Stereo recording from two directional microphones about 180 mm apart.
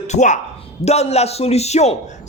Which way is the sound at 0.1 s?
40° left (ahead or behind).